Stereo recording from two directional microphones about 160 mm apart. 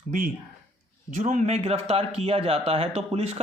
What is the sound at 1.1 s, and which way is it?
Speech, 50° right (ahead or behind).